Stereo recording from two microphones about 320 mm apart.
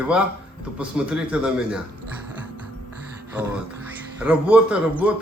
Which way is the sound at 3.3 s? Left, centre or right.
Centre.